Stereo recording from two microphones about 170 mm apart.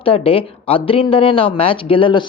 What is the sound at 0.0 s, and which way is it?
Speech, 35° left (ahead or behind).